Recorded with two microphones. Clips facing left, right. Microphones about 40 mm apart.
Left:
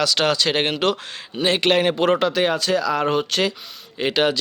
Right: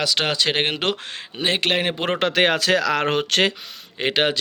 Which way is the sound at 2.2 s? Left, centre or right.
Right.